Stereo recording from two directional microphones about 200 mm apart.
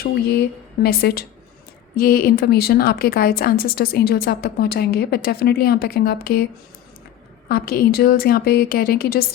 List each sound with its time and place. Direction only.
0.0 s a woman's voice: 50° left (ahead or behind)